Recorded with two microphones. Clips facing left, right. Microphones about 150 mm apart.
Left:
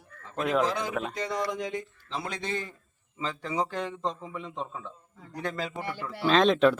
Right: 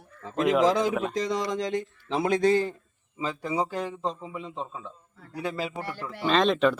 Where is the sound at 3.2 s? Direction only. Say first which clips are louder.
Right 2 dB; 10° right (ahead or behind).